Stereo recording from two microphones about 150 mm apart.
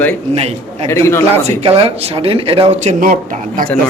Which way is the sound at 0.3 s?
40° right (ahead or behind).